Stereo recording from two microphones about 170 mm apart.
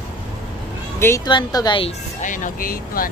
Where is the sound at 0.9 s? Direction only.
15° left (ahead or behind).